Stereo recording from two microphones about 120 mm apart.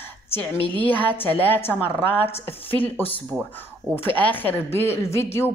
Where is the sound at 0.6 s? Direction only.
45° right (ahead or behind).